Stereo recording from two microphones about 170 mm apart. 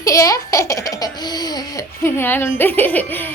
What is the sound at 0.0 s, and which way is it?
A woman's voice, 20° left (ahead or behind).